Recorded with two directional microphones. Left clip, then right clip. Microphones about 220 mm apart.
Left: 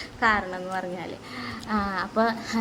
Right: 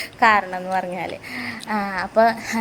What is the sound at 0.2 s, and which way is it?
A woman's voice, 15° right (ahead or behind).